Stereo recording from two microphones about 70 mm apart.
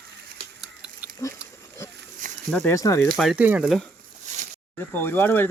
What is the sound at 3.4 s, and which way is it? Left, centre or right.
Speech, centre.